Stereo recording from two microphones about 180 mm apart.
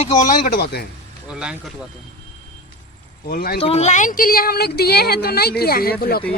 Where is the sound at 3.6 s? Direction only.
35° left (ahead or behind); by 6.2 s 60° left (ahead or behind).